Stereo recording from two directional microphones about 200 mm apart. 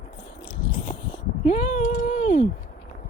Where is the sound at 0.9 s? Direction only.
40° left (ahead or behind).